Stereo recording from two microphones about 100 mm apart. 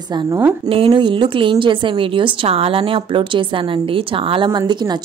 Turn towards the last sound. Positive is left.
turn(degrees=-45)  # may be behind; listen again after turning